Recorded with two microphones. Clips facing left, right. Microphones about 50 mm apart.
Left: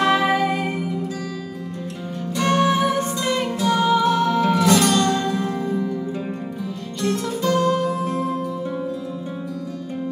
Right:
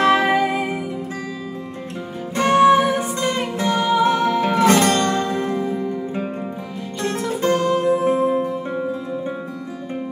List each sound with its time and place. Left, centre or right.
0.0 s music: right
0.3 s music: centre
2.3 s music: right
8.4 s music: right